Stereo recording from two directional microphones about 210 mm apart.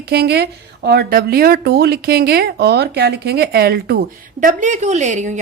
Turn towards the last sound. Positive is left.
turn(degrees=-35)  # may be behind; listen again after turning